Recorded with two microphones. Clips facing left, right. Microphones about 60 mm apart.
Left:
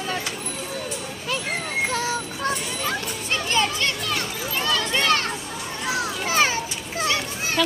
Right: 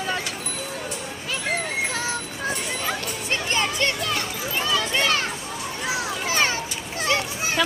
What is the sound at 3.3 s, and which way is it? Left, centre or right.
Music, right.